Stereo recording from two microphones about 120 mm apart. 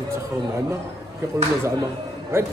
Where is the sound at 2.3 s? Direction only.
20° right (ahead or behind).